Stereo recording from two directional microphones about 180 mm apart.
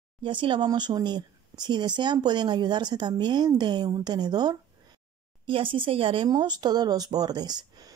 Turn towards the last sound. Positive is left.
turn(degrees=-20)  # may be behind; listen again after turning